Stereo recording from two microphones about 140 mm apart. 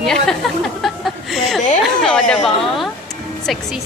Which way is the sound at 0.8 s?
Centre (ahead or behind).